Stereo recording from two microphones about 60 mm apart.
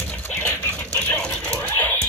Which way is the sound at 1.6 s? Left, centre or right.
Left.